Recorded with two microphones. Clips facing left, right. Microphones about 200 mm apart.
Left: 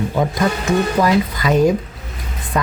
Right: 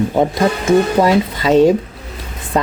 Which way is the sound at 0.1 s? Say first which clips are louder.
Right 4 dB; 30° right (ahead or behind).